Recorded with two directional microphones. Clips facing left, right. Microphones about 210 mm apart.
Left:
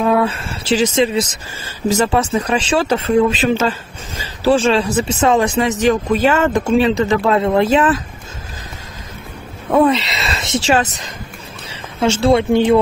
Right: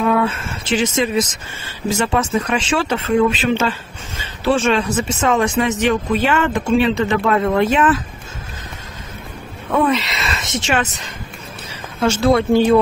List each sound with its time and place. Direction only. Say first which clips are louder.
0.0 s speech: left 2 dB; 35° left (ahead or behind)
7.2 s speech: left 1 dB; 25° left (ahead or behind)
9.7 s speech: left 4 dB; 35° left (ahead or behind)
12.0 s speech: left 1 dB; 25° left (ahead or behind)